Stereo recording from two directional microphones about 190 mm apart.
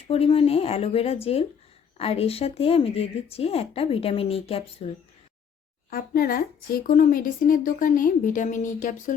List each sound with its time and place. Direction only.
0.1 s speech: 30° left (ahead or behind)
5.9 s a woman's voice: 50° left (ahead or behind)